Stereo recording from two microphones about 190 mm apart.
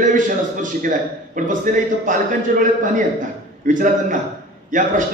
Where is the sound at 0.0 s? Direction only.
45° right (ahead or behind).